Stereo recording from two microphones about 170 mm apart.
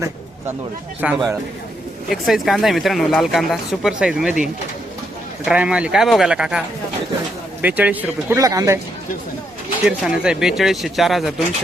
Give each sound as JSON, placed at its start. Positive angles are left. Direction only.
{"t": 1.0, "sound": "speech", "side_deg": -5}
{"t": 5.5, "sound": "speech", "side_deg": -5}
{"t": 7.6, "sound": "speech", "side_deg": -10}
{"t": 8.4, "sound": "speech", "side_deg": -20}
{"t": 9.8, "sound": "speech", "side_deg": -5}